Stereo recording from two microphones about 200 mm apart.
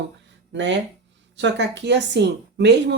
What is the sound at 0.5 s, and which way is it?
Speech, 65° right (ahead or behind).